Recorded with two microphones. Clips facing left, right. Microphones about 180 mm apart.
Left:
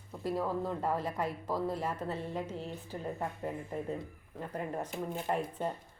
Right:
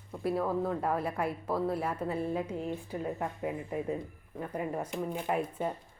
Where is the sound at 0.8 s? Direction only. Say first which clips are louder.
Right 2 dB; 10° right (ahead or behind).